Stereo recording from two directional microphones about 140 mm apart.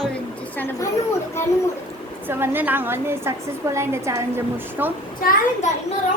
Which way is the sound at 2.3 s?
15° right (ahead or behind).